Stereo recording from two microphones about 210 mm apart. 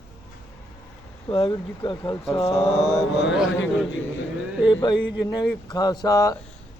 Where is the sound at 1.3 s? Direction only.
25° left (ahead or behind).